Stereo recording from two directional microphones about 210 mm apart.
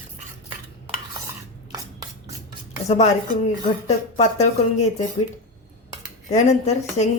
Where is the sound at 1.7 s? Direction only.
15° right (ahead or behind).